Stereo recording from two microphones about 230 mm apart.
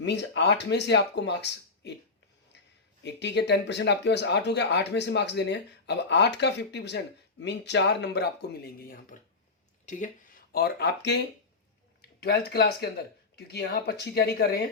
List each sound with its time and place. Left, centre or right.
0.0 s speech: left
3.0 s speech: left
9.1 s speech: left